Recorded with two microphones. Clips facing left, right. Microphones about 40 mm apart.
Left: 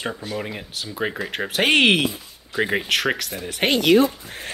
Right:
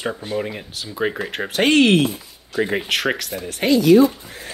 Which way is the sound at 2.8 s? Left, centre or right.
Centre.